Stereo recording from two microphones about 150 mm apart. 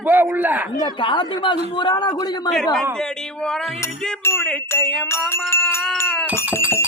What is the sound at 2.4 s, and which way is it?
Speech, 5° left (ahead or behind).